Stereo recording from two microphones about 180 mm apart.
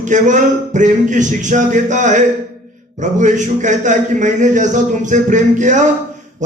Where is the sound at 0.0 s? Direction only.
45° right (ahead or behind).